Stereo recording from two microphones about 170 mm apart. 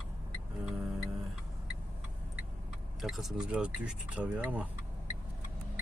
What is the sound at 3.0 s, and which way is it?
Speech, centre (ahead or behind).